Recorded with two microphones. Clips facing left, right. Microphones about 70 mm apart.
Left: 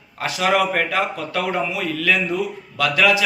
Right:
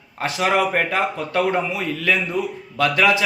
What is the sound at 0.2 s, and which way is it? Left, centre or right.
A man's voice, right.